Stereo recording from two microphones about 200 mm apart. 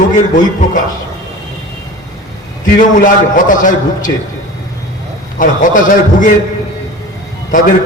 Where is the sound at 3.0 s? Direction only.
40° left (ahead or behind).